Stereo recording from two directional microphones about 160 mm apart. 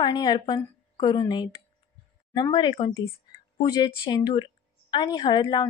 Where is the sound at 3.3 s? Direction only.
25° left (ahead or behind).